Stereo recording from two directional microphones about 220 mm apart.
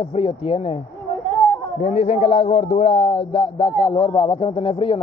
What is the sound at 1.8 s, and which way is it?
A man's voice, 30° left (ahead or behind).